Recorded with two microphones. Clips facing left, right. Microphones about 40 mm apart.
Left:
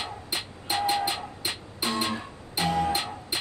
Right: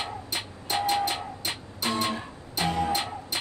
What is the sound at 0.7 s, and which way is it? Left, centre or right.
Music, centre.